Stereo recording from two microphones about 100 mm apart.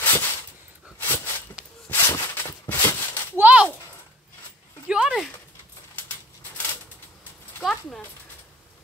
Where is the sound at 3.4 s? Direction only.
15° right (ahead or behind).